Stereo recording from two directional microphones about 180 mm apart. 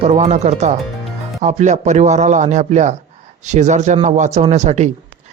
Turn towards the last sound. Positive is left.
turn(degrees=-40)  # may be behind; listen again after turning